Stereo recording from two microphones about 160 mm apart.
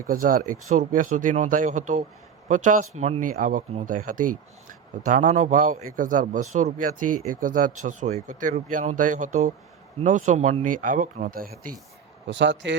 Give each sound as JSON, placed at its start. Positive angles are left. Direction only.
{"t": 0.1, "sound": "a man's voice", "side_deg": -60}
{"t": 12.6, "sound": "speech", "side_deg": -90}